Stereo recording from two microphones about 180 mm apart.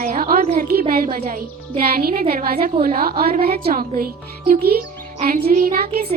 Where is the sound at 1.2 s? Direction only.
40° right (ahead or behind).